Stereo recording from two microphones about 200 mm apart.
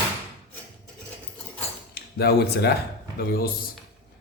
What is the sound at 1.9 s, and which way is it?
Speech, 50° left (ahead or behind).